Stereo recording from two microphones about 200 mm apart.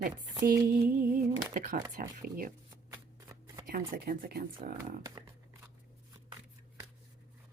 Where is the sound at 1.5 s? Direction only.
40° right (ahead or behind).